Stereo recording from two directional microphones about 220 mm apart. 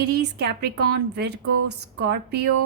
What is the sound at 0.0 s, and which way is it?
A woman's voice, 50° right (ahead or behind).